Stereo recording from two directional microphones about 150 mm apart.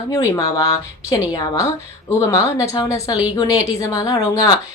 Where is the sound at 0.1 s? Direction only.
20° left (ahead or behind).